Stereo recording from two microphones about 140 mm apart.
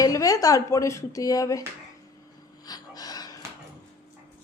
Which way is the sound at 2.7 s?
25° left (ahead or behind).